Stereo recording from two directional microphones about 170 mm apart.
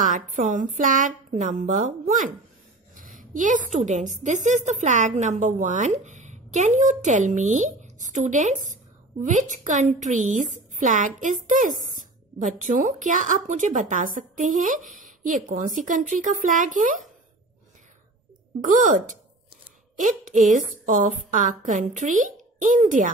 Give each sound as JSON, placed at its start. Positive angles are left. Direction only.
{"t": 0.0, "sound": "a woman's voice", "side_deg": -50}
{"t": 18.6, "sound": "a woman's voice", "side_deg": -50}